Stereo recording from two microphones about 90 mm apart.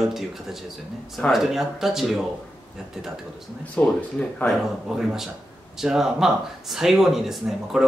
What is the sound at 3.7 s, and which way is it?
Speech, 10° left (ahead or behind).